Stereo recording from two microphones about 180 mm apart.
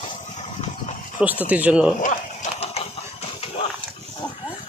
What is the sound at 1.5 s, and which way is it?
Speech, 5° right (ahead or behind).